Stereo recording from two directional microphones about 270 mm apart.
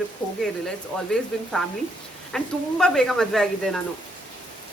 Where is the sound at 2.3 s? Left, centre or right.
Centre.